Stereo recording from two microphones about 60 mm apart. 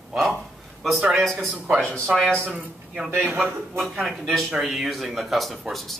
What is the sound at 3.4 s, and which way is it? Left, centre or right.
A man's voice, centre.